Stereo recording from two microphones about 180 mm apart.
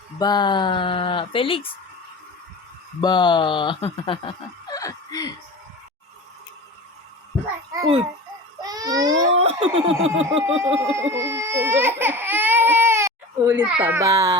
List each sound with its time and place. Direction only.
0.2 s speech: 25° left (ahead or behind)
3.0 s speech: 25° left (ahead or behind)
8.6 s baby cry: 20° right (ahead or behind)
9.3 s laughter: 35° right (ahead or behind)
9.9 s a sound: 90° right
10.8 s speech: 15° right (ahead or behind)